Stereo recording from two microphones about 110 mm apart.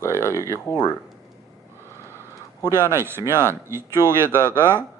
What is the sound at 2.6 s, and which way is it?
Speech, 20° right (ahead or behind).